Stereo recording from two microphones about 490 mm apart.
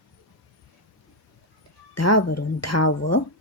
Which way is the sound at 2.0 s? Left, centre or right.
Left.